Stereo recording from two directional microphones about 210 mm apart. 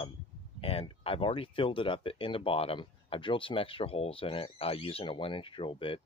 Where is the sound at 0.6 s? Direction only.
25° left (ahead or behind).